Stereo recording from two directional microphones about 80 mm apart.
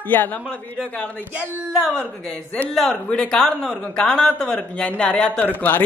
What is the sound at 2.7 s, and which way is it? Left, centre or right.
Speech, centre.